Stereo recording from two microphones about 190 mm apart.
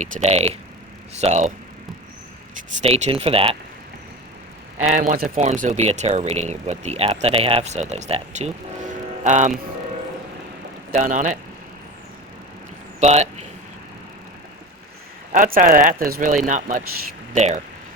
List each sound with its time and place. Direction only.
0.0 s speech: 40° right (ahead or behind)
2.8 s speech: 30° right (ahead or behind)
4.9 s speech: 45° right (ahead or behind)
5.5 s speech: 40° right (ahead or behind)
10.9 s speech: 40° right (ahead or behind)
13.0 s speech: 35° right (ahead or behind)
15.3 s speech: 45° right (ahead or behind)